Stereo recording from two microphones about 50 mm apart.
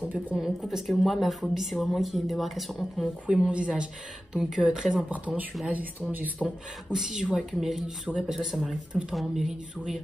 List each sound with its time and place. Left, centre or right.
0.4 s a woman's voice: centre
3.4 s speech: right
5.3 s speech: right
6.4 s a woman's voice: centre